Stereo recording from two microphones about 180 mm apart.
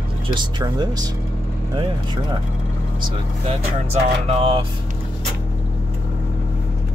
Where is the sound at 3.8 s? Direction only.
35° right (ahead or behind).